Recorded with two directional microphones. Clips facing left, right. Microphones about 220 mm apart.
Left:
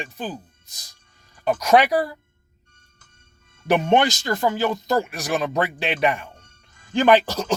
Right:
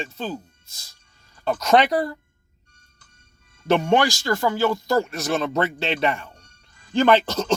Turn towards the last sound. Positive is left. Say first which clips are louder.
# left 1 dB
turn(degrees=10)  # may be behind; listen again after turning